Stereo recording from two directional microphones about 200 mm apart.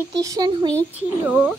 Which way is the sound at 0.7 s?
30° left (ahead or behind).